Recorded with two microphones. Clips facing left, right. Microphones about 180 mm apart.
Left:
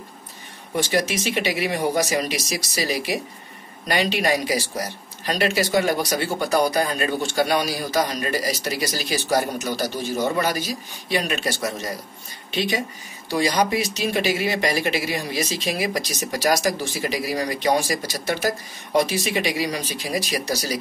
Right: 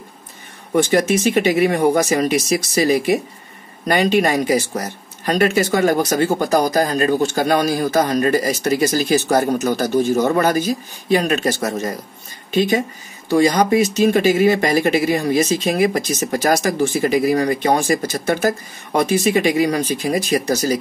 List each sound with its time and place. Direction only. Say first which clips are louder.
0.7 s speech: right 7 dB; 50° right (ahead or behind)